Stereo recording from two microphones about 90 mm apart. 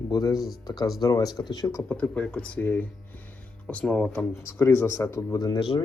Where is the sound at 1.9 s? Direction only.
15° left (ahead or behind).